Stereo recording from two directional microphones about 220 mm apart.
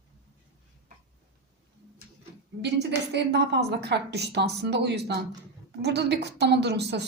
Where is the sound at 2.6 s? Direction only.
50° right (ahead or behind).